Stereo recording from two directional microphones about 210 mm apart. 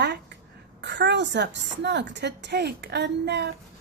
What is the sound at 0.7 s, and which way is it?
A woman's voice, 55° right (ahead or behind).